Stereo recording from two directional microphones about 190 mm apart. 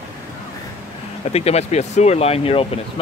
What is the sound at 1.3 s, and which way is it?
Speech, 35° left (ahead or behind).